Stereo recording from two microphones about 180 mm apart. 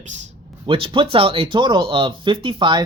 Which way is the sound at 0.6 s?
30° right (ahead or behind).